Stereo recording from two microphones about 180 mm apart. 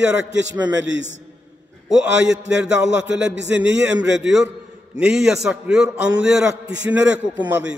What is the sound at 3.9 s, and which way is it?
A man's voice, 5° right (ahead or behind).